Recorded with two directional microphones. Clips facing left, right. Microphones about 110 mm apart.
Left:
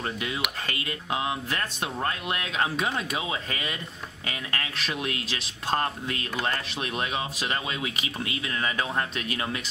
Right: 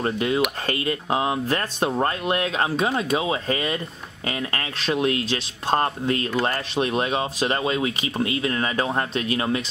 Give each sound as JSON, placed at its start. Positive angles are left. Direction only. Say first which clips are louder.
{"t": 0.0, "sound": "speech", "louder": "right 9 dB", "side_deg": -35}